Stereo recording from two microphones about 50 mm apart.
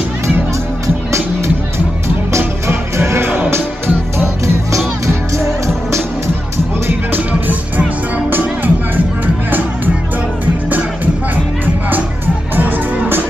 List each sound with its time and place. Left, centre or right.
2.3 s music: right
5.0 s music: right
6.9 s music: right
12.5 s music: right